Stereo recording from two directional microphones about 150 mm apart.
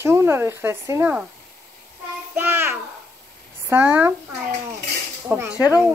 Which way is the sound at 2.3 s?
15° right (ahead or behind).